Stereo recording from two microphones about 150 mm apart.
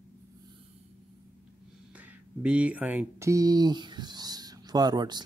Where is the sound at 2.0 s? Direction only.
10° right (ahead or behind).